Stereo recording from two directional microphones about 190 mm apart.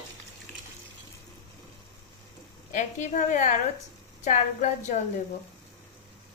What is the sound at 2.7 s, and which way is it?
A woman's voice, 40° left (ahead or behind).